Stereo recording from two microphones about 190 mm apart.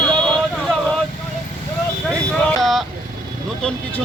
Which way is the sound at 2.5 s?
Centre (ahead or behind).